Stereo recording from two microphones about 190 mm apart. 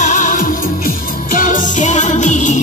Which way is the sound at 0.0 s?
40° left (ahead or behind).